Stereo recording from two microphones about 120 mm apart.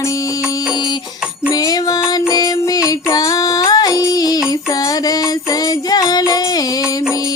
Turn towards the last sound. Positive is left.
turn(degrees=30)  # may be behind; listen again after turning